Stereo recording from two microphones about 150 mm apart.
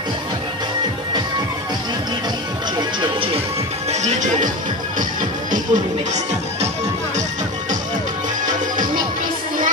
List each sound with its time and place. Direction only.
3.0 s music: 35° right (ahead or behind)
3.9 s speech: 55° right (ahead or behind)
5.5 s music: 55° right (ahead or behind)
8.5 s music: 60° right (ahead or behind)